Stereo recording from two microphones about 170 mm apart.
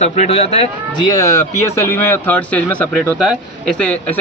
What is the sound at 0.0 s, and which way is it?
Speech, 40° left (ahead or behind).